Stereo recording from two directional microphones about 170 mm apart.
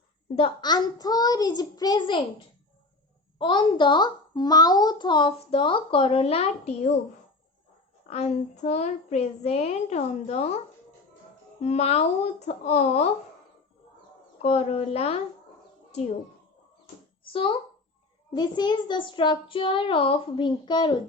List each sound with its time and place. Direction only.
0.3 s a child's voice: 30° left (ahead or behind)
3.3 s a child's voice: 30° left (ahead or behind)
8.0 s a child's voice: 40° left (ahead or behind)
11.6 s a child's voice: 40° left (ahead or behind)
14.3 s a child's voice: 40° left (ahead or behind)
17.3 s a child's voice: 30° left (ahead or behind)